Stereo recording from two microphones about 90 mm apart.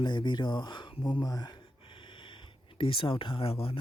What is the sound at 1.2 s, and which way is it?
Speech, 45° left (ahead or behind).